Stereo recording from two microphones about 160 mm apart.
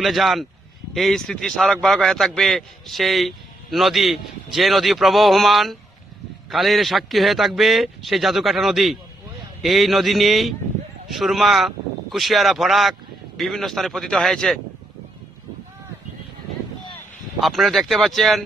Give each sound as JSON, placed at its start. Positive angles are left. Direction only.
{"t": 0.0, "sound": "a man's voice", "side_deg": 0}
{"t": 17.4, "sound": "a man's voice", "side_deg": 0}